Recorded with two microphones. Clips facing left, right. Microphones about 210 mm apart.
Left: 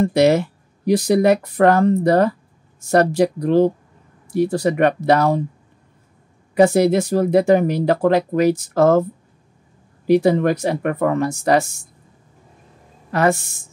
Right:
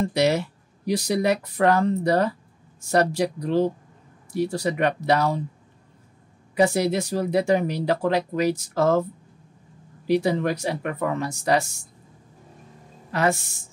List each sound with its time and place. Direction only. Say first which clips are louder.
0.0 s speech: left 7 dB; 55° left (ahead or behind)
6.5 s speech: left 7 dB; 55° left (ahead or behind)
10.0 s speech: left 7 dB; 50° left (ahead or behind)
13.1 s speech: left 5 dB; 50° left (ahead or behind)